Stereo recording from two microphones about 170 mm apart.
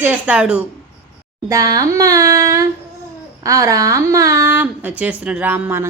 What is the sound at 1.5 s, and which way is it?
A woman's voice, 20° right (ahead or behind).